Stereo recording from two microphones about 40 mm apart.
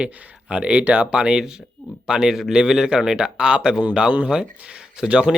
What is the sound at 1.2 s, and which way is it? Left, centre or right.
Speech, centre.